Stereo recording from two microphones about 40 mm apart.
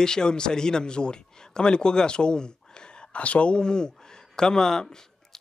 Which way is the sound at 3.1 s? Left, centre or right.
Left.